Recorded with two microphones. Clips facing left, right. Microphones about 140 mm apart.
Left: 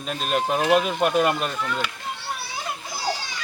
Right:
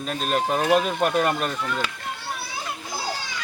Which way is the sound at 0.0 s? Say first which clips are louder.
Even; centre (ahead or behind).